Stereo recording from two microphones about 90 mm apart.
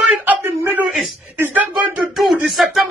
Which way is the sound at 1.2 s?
20° right (ahead or behind).